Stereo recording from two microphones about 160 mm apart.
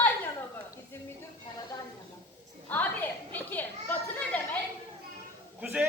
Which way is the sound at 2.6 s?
10° left (ahead or behind).